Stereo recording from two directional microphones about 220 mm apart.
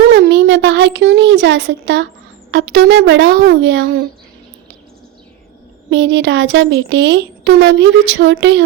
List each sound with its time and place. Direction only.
0.1 s a sound: 50° right (ahead or behind)
2.5 s speech: 50° right (ahead or behind)
5.9 s speech: 60° right (ahead or behind)